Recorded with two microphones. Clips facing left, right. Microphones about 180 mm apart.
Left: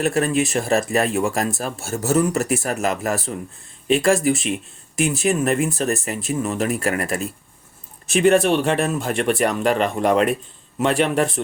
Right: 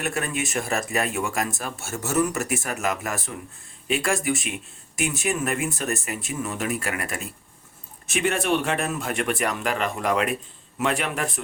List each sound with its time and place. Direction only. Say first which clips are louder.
0.0 s speech: left 8 dB; 30° left (ahead or behind)